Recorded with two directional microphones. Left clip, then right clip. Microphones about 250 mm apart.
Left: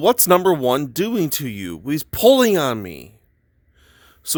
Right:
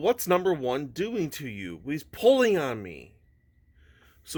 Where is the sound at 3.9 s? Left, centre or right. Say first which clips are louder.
Left 15 dB; left.